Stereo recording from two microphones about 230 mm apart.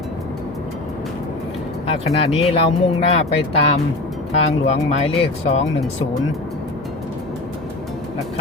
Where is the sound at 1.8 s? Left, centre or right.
Left.